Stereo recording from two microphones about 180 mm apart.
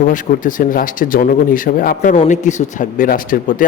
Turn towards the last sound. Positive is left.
turn(degrees=50)  # may be behind; listen again after turning